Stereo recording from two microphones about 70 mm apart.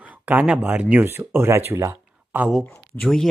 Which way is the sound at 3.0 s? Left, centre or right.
Centre.